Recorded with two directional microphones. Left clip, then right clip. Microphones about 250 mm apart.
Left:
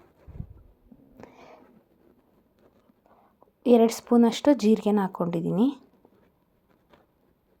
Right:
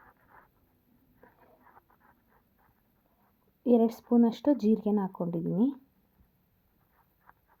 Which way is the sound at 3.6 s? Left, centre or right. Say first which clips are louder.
Left 6 dB; centre.